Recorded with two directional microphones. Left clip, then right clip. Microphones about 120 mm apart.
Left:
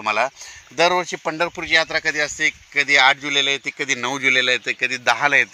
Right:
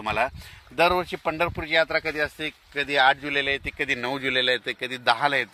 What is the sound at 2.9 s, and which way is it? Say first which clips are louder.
Speech: left 5 dB; 90° left.